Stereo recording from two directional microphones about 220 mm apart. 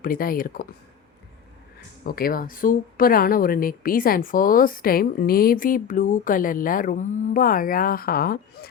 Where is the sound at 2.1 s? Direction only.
40° left (ahead or behind).